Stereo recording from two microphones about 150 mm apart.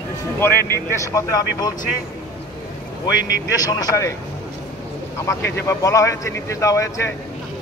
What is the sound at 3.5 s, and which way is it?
Speech, 25° left (ahead or behind).